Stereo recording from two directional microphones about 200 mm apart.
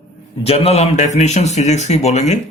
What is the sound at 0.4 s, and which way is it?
Speech, 30° left (ahead or behind).